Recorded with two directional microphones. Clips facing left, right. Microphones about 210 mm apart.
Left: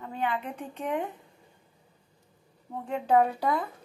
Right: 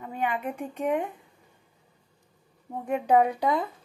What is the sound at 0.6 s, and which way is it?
Speech, 10° right (ahead or behind).